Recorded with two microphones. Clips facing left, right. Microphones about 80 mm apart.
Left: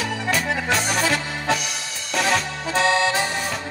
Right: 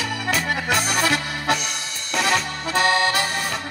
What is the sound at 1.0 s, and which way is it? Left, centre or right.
Accordion, right.